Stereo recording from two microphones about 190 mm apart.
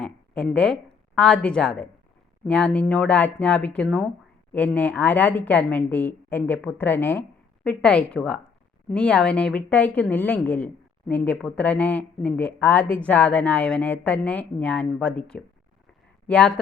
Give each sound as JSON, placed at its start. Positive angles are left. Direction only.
{"t": 0.0, "sound": "speech", "side_deg": 5}